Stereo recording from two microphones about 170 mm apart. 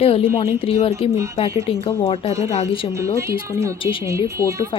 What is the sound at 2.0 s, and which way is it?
Speech, 35° left (ahead or behind).